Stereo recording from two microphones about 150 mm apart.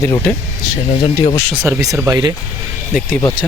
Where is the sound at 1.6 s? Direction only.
20° right (ahead or behind).